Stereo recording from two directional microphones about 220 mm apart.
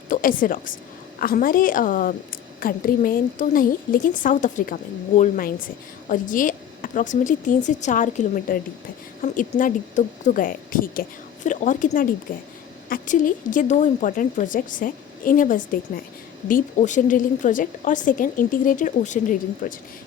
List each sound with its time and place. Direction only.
0.1 s a woman's voice: 40° left (ahead or behind)